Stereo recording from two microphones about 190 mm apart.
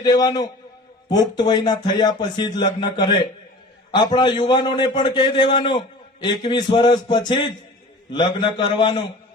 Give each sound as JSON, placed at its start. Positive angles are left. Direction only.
{"t": 0.0, "sound": "a man's voice", "side_deg": 20}